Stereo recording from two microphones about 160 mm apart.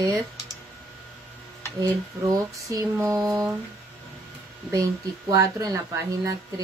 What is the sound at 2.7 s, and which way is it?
Speech, 15° right (ahead or behind).